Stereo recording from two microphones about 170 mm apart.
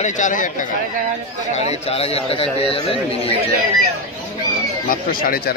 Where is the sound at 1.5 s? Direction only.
40° left (ahead or behind).